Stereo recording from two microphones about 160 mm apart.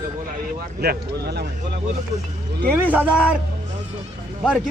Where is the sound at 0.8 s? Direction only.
85° right.